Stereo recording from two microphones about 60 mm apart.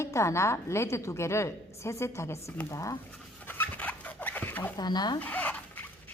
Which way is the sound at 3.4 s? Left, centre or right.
Left.